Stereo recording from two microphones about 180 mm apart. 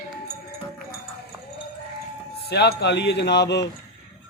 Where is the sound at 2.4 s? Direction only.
65° left (ahead or behind).